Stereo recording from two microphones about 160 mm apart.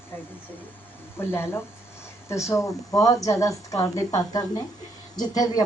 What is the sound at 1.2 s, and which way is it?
Speech, 15° left (ahead or behind).